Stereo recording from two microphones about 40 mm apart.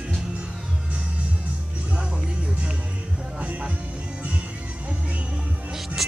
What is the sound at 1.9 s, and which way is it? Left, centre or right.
Music, right.